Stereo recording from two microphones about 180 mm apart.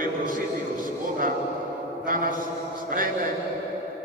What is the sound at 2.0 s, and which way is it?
Speech, 50° right (ahead or behind).